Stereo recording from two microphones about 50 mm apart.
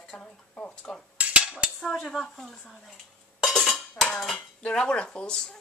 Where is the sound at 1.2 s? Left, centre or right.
Right.